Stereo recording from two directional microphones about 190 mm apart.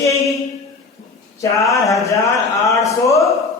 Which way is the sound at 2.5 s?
15° left (ahead or behind).